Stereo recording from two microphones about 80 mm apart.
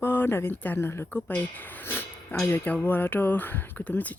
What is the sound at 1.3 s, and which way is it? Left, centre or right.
Speech, left.